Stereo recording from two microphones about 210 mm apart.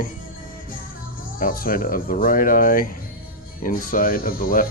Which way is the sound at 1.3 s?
40° left (ahead or behind).